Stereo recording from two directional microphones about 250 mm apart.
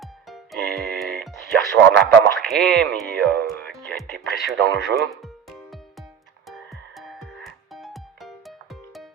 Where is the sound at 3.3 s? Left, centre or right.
Right.